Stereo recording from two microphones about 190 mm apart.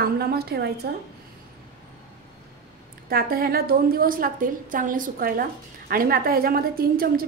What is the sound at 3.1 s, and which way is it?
A woman's voice, 50° right (ahead or behind).